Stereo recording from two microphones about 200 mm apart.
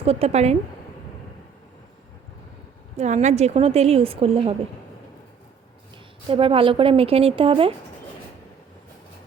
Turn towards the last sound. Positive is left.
turn(degrees=-25)  # may be behind; listen again after turning